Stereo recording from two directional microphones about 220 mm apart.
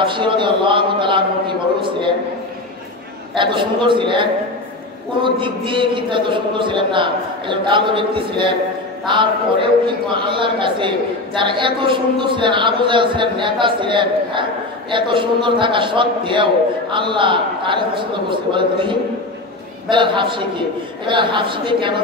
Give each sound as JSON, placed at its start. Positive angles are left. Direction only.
{"t": 0.0, "sound": "a man's voice", "side_deg": -20}
{"t": 1.8, "sound": "a sound", "side_deg": -20}
{"t": 3.3, "sound": "a woman's voice", "side_deg": -20}